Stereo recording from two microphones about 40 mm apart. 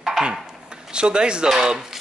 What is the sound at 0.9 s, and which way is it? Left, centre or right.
Speech, right.